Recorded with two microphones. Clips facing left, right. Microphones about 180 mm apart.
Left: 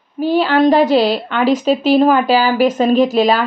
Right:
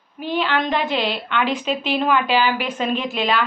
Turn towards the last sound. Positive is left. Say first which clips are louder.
# left 10 dB
turn(degrees=40)  # may be behind; listen again after turning